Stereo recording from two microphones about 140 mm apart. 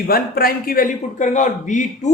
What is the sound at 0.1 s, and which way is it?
A man's voice, 90° left.